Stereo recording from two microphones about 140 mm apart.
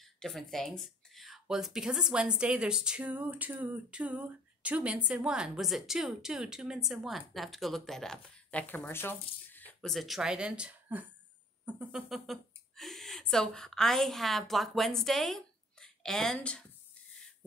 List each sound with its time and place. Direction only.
0.0 s speech: centre (ahead or behind)
9.8 s speech: centre (ahead or behind)